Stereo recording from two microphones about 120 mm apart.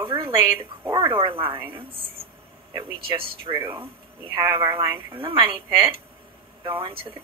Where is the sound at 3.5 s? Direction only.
20° right (ahead or behind).